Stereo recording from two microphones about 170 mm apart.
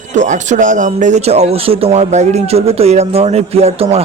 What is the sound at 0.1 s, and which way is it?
Speech, 45° right (ahead or behind).